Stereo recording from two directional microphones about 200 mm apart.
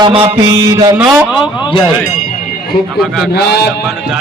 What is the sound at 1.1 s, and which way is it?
Speech, 5° right (ahead or behind).